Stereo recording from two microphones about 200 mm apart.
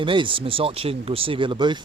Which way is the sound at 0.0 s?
25° right (ahead or behind).